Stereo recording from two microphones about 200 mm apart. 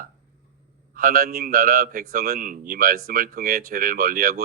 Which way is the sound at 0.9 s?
45° right (ahead or behind).